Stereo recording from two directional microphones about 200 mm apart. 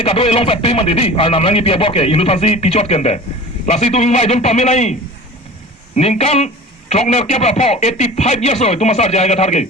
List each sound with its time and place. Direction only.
0.0 s a man's voice: 30° left (ahead or behind)